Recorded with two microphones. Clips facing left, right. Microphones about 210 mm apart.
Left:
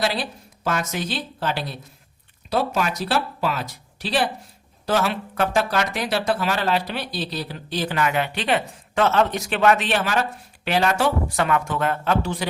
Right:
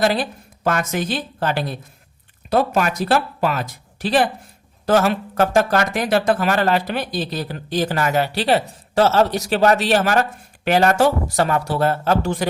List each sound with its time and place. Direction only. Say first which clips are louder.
0.0 s speech: right 5 dB; 50° right (ahead or behind)